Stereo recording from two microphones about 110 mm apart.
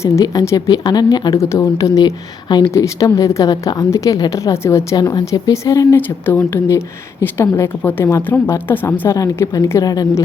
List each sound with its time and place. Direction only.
0.0 s a woman's voice: 30° left (ahead or behind)
1.4 s a woman's voice: 25° left (ahead or behind)
2.7 s a woman's voice: 30° left (ahead or behind)
9.1 s a woman's voice: 30° left (ahead or behind)